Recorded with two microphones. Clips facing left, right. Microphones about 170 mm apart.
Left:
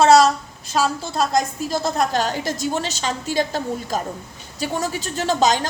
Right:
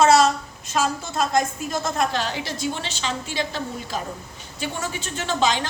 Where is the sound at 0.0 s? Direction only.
35° left (ahead or behind).